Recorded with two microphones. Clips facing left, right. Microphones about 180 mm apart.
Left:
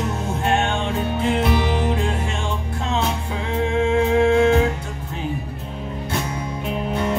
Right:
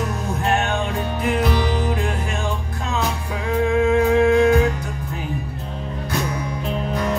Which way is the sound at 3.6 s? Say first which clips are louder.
Right 2 dB; 25° left (ahead or behind).